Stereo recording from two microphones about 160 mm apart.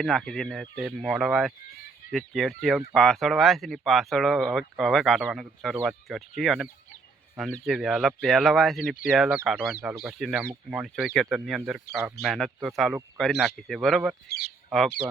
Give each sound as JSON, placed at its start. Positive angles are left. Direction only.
{"t": 0.0, "sound": "speech", "side_deg": 0}
{"t": 14.3, "sound": "speech", "side_deg": 80}